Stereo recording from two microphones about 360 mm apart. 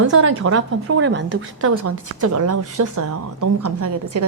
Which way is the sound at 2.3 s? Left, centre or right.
Right.